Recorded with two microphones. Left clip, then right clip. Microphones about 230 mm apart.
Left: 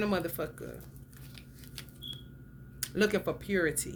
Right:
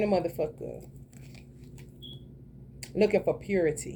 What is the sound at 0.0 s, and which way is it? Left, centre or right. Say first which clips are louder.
Speech: right 5 dB; left.